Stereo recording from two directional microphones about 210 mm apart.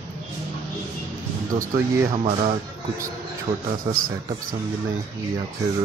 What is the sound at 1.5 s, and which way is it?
Speech, 35° right (ahead or behind).